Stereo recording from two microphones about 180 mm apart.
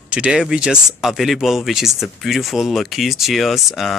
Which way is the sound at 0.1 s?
5° right (ahead or behind).